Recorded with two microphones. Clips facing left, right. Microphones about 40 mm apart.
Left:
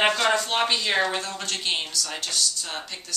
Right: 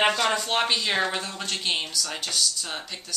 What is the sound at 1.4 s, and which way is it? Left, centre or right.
A woman's voice, centre.